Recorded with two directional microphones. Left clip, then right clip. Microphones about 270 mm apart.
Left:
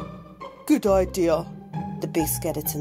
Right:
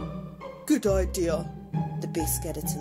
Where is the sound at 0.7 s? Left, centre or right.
Left.